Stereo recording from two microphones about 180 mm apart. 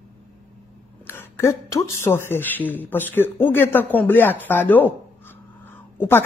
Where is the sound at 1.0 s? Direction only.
15° left (ahead or behind).